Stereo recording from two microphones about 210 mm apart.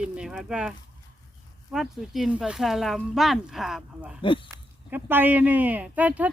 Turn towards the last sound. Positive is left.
turn(degrees=-5)  # may be behind; listen again after turning